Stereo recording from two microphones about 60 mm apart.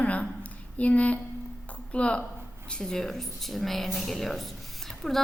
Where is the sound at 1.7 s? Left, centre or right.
Left.